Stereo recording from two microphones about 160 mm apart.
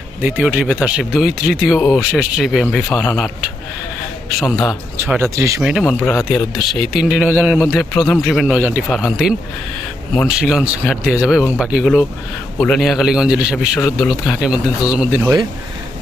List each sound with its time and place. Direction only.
0.2 s a man's voice: 10° right (ahead or behind); by 3.5 s 5° left (ahead or behind)
4.5 s speech: 20° left (ahead or behind)
4.9 s speech: 15° right (ahead or behind)
5.6 s a man's voice: centre (ahead or behind)
8.9 s a man's voice: centre (ahead or behind)